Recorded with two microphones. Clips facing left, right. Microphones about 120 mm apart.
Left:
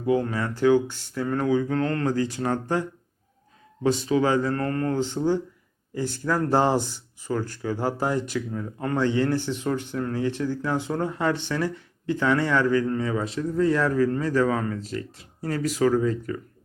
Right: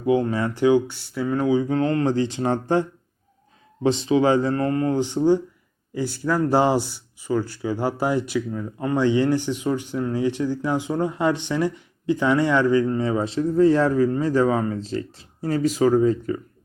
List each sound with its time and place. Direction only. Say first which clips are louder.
0.0 s speech: right 3 dB; 20° right (ahead or behind)
3.8 s speech: right 3 dB; 25° right (ahead or behind)